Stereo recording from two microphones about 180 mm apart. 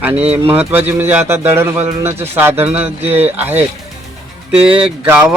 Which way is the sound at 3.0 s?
35° right (ahead or behind).